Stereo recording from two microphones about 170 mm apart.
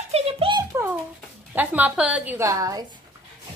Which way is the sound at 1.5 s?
10° right (ahead or behind).